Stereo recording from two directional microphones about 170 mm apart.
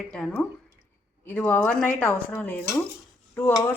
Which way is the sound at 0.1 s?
5° left (ahead or behind).